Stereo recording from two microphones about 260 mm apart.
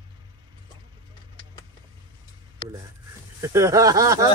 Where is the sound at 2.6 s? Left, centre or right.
Centre.